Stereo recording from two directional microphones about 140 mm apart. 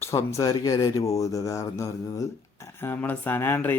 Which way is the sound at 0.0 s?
20° left (ahead or behind).